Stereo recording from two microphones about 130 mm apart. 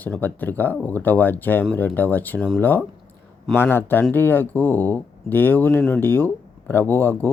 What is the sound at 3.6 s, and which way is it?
Speech, 15° left (ahead or behind).